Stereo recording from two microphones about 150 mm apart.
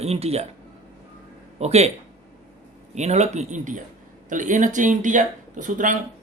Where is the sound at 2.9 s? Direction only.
50° right (ahead or behind).